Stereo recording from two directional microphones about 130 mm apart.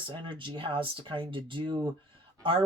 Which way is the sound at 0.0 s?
40° right (ahead or behind).